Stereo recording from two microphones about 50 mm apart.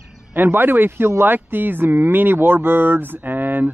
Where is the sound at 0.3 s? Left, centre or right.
Right.